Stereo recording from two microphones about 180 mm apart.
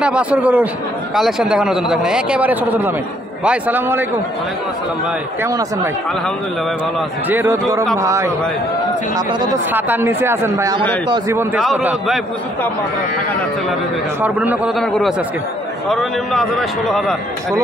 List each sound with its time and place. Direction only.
0.0 s a man's voice: 5° right (ahead or behind)
7.2 s speech: 10° right (ahead or behind)
9.7 s speech: 10° right (ahead or behind)
14.2 s speech: 10° right (ahead or behind)
14.8 s a man's voice: centre (ahead or behind)